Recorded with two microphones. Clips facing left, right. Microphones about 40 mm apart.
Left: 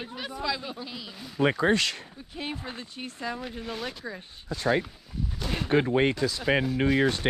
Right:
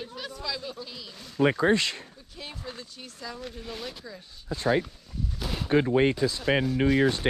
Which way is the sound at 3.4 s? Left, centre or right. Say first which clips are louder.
Left 3 dB; centre.